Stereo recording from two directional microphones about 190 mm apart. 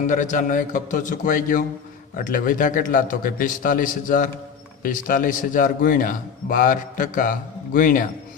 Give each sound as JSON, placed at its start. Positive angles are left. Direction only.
{"t": 0.1, "sound": "a man's voice", "side_deg": 40}